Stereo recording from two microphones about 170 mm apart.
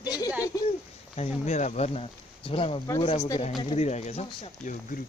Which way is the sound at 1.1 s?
40° left (ahead or behind).